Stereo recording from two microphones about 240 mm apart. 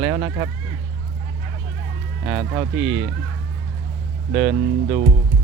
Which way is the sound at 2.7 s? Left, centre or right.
Right.